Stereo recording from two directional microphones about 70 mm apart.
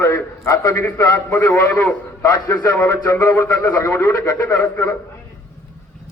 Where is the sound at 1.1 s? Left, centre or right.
Left.